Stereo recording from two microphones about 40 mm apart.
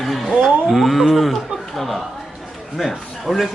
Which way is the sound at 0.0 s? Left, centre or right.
Centre.